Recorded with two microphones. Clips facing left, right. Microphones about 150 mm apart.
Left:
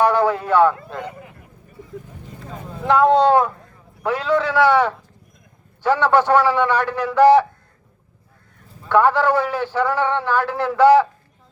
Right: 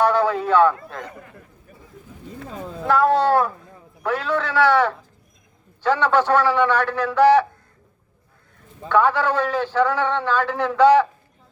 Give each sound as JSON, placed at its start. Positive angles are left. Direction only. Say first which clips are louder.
{"t": 0.0, "sound": "speech", "louder": "left 1 dB", "side_deg": 15}
{"t": 2.9, "sound": "a man's voice", "louder": "left 3 dB", "side_deg": 15}
{"t": 8.9, "sound": "a man's voice", "louder": "left 3 dB", "side_deg": 10}